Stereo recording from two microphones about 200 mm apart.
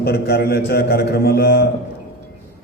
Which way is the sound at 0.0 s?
50° left (ahead or behind).